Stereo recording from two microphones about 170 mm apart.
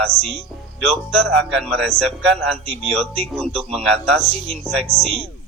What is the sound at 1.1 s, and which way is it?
Speech, centre (ahead or behind).